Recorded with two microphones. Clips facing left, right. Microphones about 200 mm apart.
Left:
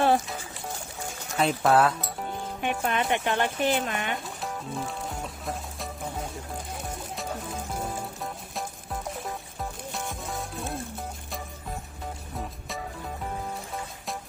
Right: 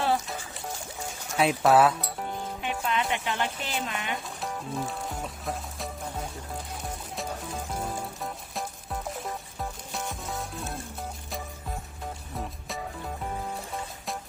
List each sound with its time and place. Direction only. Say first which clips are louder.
1.4 s speech: right 1 dB; 5° right (ahead or behind)
2.6 s speech: left 3 dB; 55° left (ahead or behind)
4.4 s music: right 1 dB; centre (ahead or behind)
7.2 s music: right 1 dB; centre (ahead or behind)
12.4 s music: even; centre (ahead or behind)